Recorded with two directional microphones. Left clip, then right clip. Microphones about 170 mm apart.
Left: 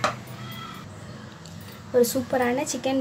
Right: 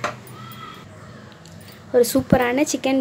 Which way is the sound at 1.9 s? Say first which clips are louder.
Right 5 dB; 40° right (ahead or behind).